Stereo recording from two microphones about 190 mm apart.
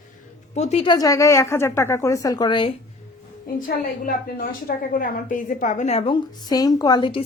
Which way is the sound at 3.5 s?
50° left (ahead or behind).